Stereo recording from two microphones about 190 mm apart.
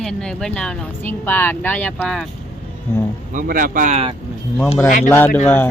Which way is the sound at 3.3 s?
45° right (ahead or behind).